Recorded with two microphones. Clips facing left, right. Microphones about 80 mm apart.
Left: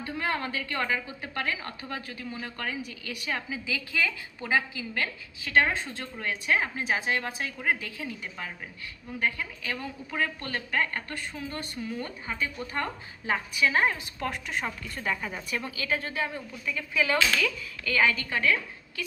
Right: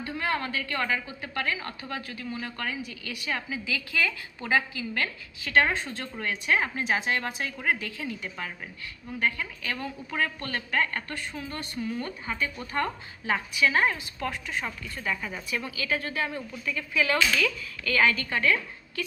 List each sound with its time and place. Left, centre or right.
0.2 s a woman's voice: left
5.6 s a woman's voice: centre
15.1 s a woman's voice: left
16.3 s a woman's voice: centre